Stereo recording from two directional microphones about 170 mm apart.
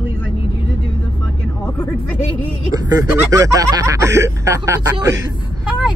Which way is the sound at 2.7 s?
20° right (ahead or behind).